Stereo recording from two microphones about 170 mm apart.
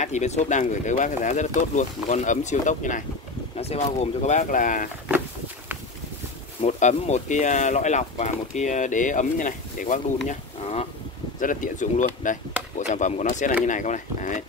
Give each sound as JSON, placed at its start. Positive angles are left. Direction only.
{"t": 0.0, "sound": "speech", "side_deg": 45}
{"t": 6.6, "sound": "speech", "side_deg": 40}
{"t": 10.2, "sound": "insect", "side_deg": 40}
{"t": 11.3, "sound": "speech", "side_deg": 50}